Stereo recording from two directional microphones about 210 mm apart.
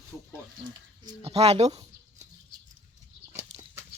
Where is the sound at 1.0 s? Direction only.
30° right (ahead or behind).